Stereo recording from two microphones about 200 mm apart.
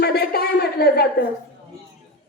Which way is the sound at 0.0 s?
50° left (ahead or behind).